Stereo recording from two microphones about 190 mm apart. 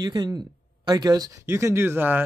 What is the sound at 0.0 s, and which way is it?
Speech, 20° right (ahead or behind).